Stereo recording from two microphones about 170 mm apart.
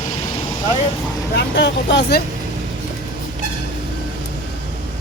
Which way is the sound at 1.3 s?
85° left.